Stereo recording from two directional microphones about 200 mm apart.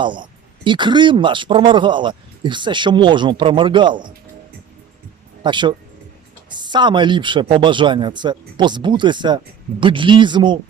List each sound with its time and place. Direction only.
0.0 s speech: 25° right (ahead or behind)
5.4 s speech: 25° right (ahead or behind)